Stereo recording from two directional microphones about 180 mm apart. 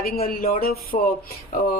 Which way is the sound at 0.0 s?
55° left (ahead or behind).